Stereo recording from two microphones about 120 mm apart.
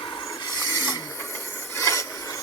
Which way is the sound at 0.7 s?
35° left (ahead or behind).